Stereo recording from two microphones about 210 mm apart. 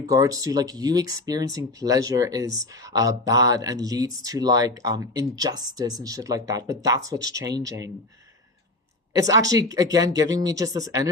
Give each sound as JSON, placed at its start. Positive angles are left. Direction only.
{"t": 0.1, "sound": "speech", "side_deg": -15}
{"t": 2.5, "sound": "speech", "side_deg": 65}
{"t": 2.9, "sound": "speech", "side_deg": -15}
{"t": 9.1, "sound": "speech", "side_deg": -15}